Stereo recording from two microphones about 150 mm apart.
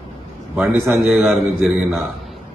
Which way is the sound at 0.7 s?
20° right (ahead or behind).